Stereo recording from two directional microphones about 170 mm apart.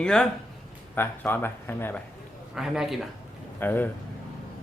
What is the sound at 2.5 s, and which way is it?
Speech, centre (ahead or behind).